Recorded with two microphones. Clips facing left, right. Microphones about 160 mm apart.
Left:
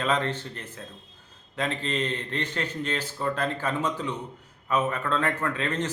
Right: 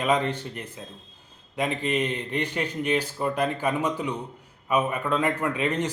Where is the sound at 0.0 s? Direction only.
15° right (ahead or behind).